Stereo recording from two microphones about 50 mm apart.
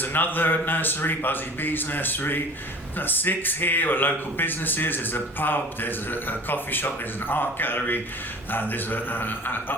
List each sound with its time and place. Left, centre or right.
0.0 s a man's voice: left